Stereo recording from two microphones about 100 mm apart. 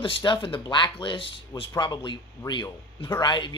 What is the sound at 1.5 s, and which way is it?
Speech, 40° left (ahead or behind).